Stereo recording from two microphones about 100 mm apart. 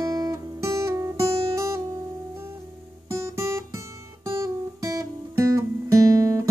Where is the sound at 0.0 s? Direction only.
35° right (ahead or behind).